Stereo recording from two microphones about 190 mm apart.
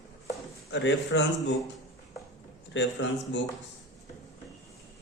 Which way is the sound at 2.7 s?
70° left (ahead or behind).